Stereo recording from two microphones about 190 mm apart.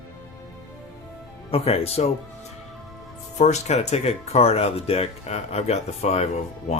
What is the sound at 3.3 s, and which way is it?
Speech, 35° left (ahead or behind).